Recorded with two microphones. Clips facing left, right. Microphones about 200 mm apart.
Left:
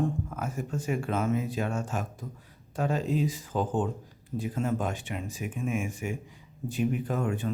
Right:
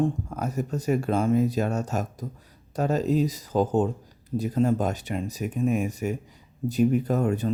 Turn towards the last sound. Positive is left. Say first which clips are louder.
# right 6 dB
turn(degrees=-40)  # may be behind; listen again after turning